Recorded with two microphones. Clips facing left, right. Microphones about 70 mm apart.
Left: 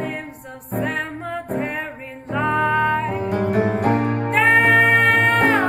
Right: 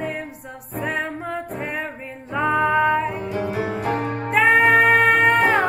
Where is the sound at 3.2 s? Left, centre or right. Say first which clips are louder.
Left 5 dB; left.